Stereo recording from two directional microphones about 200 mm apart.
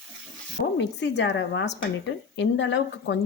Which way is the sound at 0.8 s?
60° left (ahead or behind).